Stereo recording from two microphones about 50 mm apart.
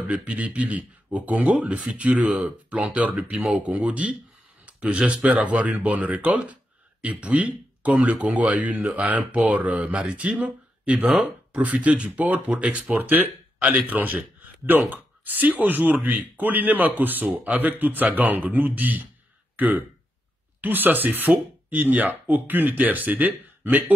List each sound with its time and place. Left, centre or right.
0.1 s speech: right